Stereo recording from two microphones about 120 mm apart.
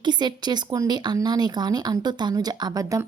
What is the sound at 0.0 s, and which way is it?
Speech, 40° right (ahead or behind).